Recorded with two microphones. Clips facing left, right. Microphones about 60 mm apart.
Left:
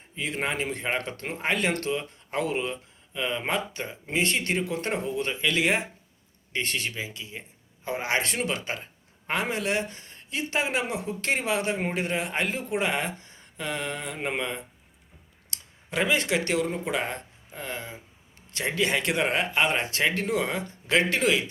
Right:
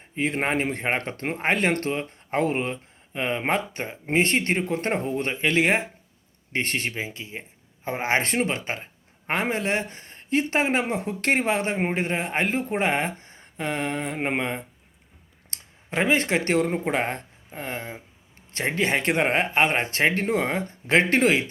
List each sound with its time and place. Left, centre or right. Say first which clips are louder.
0.2 s speech: right 5 dB; right
11.0 s speech: right 5 dB; right